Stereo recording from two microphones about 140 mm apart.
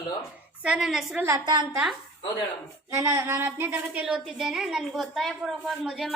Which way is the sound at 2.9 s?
20° right (ahead or behind).